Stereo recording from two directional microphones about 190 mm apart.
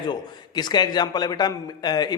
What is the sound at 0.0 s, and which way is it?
A man's voice, 20° left (ahead or behind).